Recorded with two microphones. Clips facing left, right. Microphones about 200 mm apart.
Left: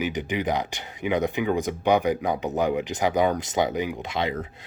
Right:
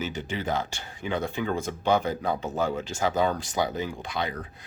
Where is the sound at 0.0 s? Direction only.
15° left (ahead or behind).